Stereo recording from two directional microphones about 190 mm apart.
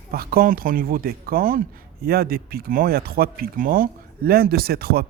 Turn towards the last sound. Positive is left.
turn(degrees=-55)  # may be behind; listen again after turning